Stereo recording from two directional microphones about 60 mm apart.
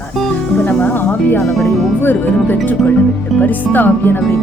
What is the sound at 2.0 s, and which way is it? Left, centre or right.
Speech, left.